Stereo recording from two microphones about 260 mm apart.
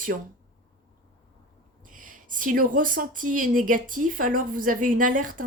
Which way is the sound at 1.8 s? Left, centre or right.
Right.